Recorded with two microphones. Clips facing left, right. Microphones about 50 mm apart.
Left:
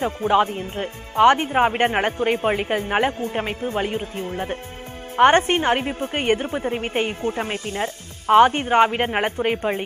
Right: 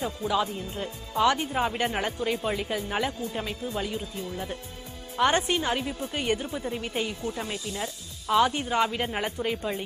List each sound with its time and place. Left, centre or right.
0.0 s a woman's voice: left